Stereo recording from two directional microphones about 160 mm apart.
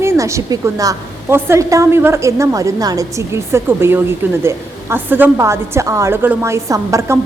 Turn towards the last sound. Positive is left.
turn(degrees=-20)  # may be behind; listen again after turning